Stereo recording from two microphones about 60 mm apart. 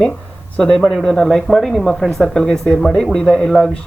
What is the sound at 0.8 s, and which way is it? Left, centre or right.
Speech, centre.